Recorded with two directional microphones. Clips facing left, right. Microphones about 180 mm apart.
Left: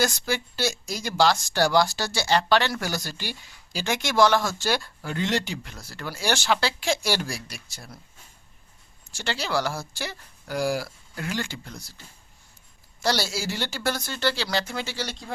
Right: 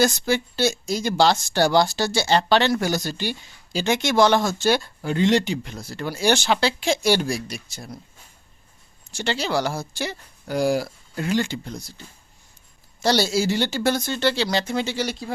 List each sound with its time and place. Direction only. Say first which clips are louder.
0.0 s speech: right 5 dB; 25° right (ahead or behind)
9.1 s speech: right 4 dB; 20° right (ahead or behind)